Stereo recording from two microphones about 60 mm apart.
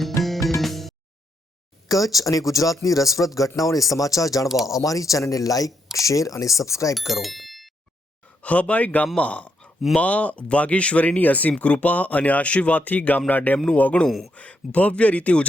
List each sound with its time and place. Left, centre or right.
0.2 s music: left
0.6 s music: centre
1.9 s speech: left
6.9 s speech: centre
8.4 s speech: left
14.1 s speech: centre
14.3 s speech: left